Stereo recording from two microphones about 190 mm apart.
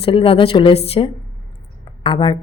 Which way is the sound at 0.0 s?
30° left (ahead or behind).